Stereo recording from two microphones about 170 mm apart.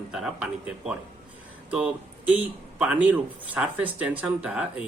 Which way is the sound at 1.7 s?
10° right (ahead or behind).